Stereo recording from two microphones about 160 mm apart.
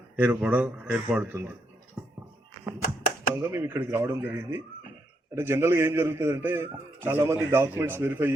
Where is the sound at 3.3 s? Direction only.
15° right (ahead or behind).